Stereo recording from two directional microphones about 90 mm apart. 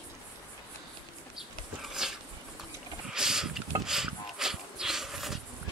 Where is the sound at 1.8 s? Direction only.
5° right (ahead or behind).